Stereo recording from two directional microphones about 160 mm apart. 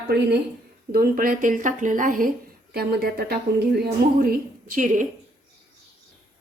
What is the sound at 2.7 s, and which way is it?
Speech, 75° right (ahead or behind).